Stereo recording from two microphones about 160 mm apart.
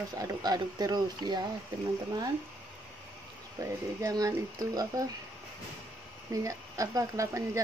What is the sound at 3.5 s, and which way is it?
Speech, 20° right (ahead or behind).